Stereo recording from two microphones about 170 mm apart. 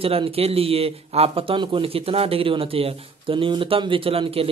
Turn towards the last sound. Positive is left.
turn(degrees=-35)  # may be behind; listen again after turning